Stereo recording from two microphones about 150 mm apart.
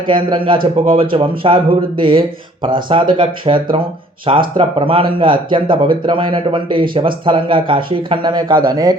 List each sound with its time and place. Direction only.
0.1 s speech: 35° right (ahead or behind)